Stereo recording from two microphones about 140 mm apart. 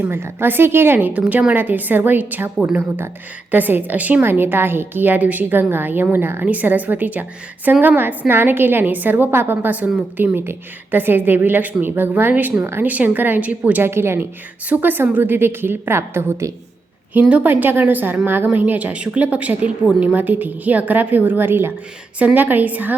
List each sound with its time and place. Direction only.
0.0 s a woman's voice: 15° right (ahead or behind)